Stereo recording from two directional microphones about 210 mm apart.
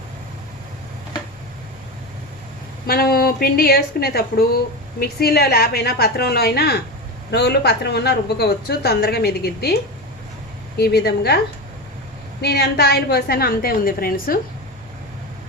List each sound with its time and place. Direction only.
2.8 s a woman's voice: 45° left (ahead or behind)
10.8 s a woman's voice: 50° left (ahead or behind)
12.4 s a woman's voice: 50° left (ahead or behind)